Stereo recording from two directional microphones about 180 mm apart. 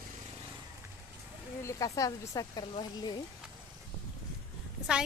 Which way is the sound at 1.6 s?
20° left (ahead or behind).